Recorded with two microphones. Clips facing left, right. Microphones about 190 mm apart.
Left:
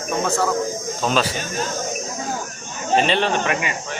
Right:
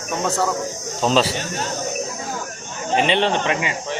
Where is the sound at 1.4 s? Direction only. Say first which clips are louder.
Left 1 dB; 70° right (ahead or behind).